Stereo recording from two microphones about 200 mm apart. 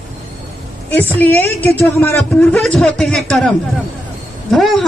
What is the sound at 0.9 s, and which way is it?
A woman's voice, 10° left (ahead or behind).